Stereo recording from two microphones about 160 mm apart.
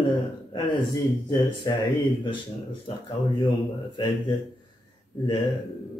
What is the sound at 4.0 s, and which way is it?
Speech, 25° left (ahead or behind).